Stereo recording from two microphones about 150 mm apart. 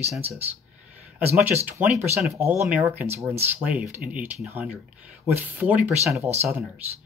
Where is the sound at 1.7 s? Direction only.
15° right (ahead or behind).